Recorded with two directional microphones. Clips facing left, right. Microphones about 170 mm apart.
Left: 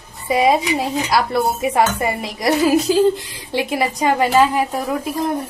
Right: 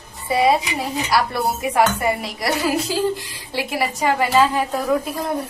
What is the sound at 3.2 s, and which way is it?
Speech, 20° left (ahead or behind).